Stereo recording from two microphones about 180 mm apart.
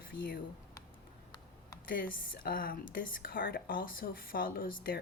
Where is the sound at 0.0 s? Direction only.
55° left (ahead or behind).